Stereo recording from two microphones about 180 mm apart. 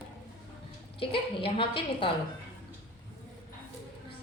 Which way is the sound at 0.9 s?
30° left (ahead or behind).